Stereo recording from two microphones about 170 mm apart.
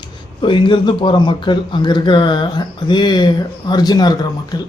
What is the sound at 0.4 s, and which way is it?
A man's voice, 30° left (ahead or behind).